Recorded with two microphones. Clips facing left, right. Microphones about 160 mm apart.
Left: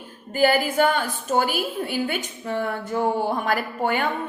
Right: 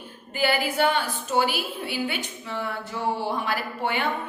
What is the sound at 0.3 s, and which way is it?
A woman's voice, 45° left (ahead or behind).